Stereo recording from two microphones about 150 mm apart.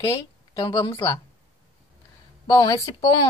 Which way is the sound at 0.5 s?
25° left (ahead or behind).